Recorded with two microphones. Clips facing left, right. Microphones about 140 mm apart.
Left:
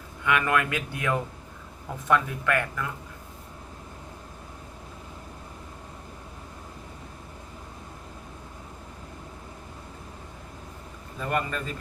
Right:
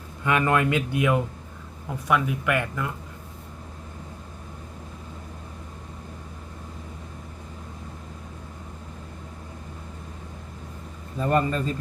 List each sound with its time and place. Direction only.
0.3 s speech: 30° right (ahead or behind)
11.2 s a man's voice: 30° right (ahead or behind)